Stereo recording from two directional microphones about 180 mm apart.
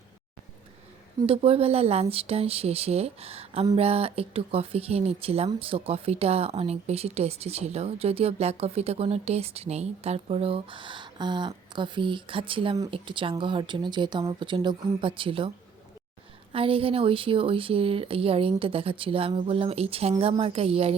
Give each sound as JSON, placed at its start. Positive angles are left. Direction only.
{"t": 1.3, "sound": "speech", "side_deg": -35}